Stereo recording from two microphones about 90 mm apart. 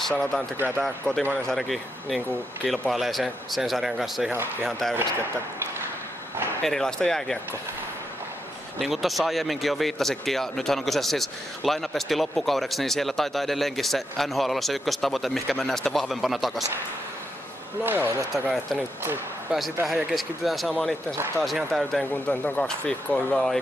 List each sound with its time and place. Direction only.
0.1 s speech: 10° left (ahead or behind)
6.6 s speech: 5° left (ahead or behind)
8.7 s speech: centre (ahead or behind)
17.8 s speech: 20° right (ahead or behind)
19.5 s speech: 10° right (ahead or behind)
22.1 s speech: 20° left (ahead or behind)